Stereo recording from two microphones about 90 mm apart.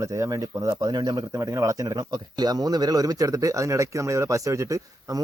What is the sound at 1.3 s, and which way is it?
Speech, 35° right (ahead or behind).